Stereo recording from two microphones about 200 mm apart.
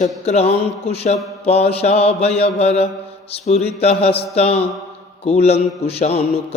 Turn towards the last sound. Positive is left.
turn(degrees=30)  # may be behind; listen again after turning